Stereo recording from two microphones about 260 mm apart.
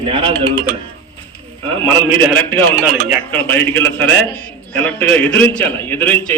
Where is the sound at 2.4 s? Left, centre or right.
Centre.